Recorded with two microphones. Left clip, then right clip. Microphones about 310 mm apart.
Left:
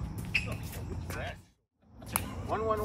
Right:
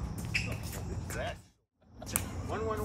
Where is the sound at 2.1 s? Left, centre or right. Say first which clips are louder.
Left 3 dB; centre.